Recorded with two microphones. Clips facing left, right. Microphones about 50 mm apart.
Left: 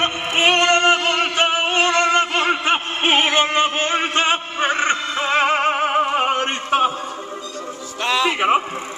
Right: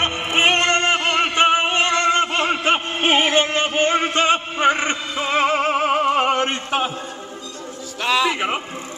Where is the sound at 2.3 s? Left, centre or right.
Left.